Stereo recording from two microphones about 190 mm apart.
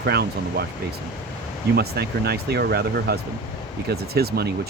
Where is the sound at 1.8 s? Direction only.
55° right (ahead or behind).